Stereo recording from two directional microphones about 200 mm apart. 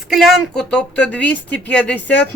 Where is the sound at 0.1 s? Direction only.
Centre (ahead or behind).